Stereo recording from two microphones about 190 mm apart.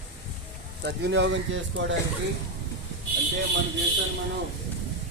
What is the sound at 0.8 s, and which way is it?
Speech, 60° right (ahead or behind).